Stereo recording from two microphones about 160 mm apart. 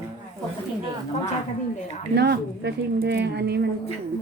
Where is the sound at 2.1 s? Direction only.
90° right.